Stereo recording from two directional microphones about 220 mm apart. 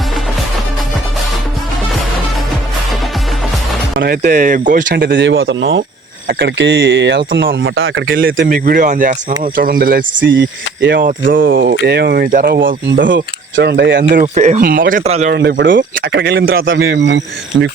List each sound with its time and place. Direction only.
3.9 s speech: 40° right (ahead or behind)
10.2 s speech: 55° right (ahead or behind)
11.3 s speech: 40° right (ahead or behind)
13.1 s speech: 55° right (ahead or behind)
14.1 s speech: 35° right (ahead or behind)
15.3 s speech: 50° right (ahead or behind)